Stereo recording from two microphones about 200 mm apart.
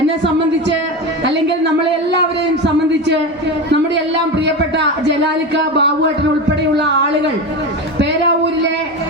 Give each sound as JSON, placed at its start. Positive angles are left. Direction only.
{"t": 1.2, "sound": "music", "side_deg": -60}
{"t": 3.7, "sound": "speech", "side_deg": -60}